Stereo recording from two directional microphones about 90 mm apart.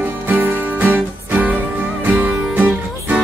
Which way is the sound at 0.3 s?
20° right (ahead or behind).